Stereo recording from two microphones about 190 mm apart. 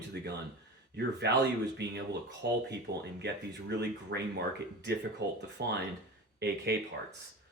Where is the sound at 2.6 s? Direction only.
60° right (ahead or behind).